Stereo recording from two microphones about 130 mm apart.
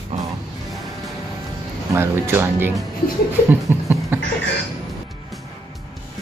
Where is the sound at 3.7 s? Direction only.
20° right (ahead or behind).